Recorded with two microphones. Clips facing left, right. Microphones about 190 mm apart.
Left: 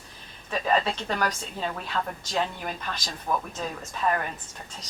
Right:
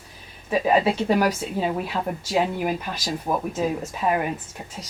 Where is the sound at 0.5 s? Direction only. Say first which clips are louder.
Right 6 dB; 10° right (ahead or behind).